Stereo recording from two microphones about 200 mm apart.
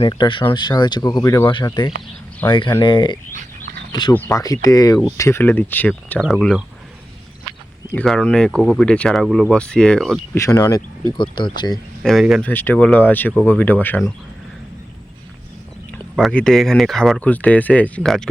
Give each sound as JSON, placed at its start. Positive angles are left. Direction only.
{"t": 0.0, "sound": "speech", "side_deg": 25}
{"t": 7.9, "sound": "speech", "side_deg": 5}
{"t": 10.3, "sound": "speech", "side_deg": 15}
{"t": 12.0, "sound": "speech", "side_deg": 0}
{"t": 12.5, "sound": "speech", "side_deg": 10}
{"t": 16.1, "sound": "speech", "side_deg": 5}